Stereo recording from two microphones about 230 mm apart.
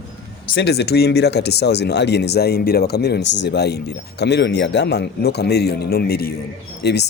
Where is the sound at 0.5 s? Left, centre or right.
Left.